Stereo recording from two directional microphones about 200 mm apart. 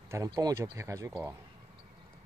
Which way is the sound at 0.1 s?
20° right (ahead or behind).